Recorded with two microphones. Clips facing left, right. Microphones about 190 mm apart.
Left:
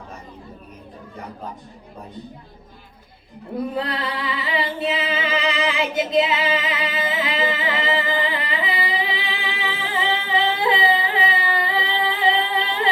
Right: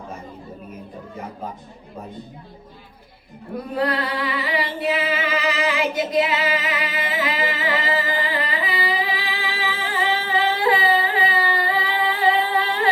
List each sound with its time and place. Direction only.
3.5 s singing: 25° left (ahead or behind)
5.9 s music: 25° left (ahead or behind)